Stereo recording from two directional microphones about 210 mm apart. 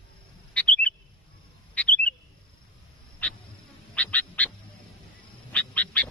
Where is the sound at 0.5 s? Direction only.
5° left (ahead or behind).